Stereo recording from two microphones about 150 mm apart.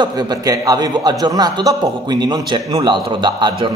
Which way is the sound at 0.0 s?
25° right (ahead or behind).